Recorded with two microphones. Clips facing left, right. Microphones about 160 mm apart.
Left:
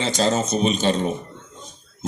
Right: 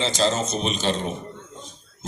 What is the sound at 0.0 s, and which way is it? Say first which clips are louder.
Speech: left 2 dB; 50° left (ahead or behind).